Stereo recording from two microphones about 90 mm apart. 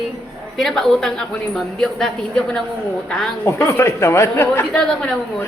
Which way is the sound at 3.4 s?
30° left (ahead or behind).